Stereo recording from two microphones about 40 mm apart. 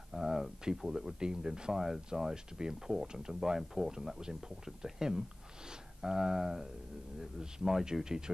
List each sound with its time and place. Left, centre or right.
0.1 s speech: centre